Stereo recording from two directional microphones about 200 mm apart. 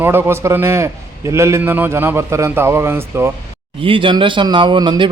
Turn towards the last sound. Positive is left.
turn(degrees=-20)  # may be behind; listen again after turning